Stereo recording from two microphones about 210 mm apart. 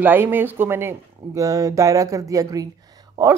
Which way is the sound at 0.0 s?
10° right (ahead or behind).